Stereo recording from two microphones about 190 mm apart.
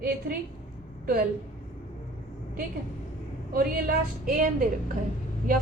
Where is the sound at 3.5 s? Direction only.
50° right (ahead or behind).